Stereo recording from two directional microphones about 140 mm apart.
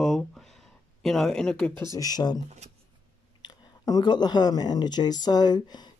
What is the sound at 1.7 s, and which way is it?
Speech, 30° right (ahead or behind).